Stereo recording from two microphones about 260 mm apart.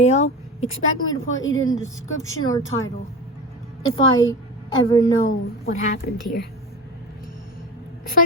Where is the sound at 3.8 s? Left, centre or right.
Left.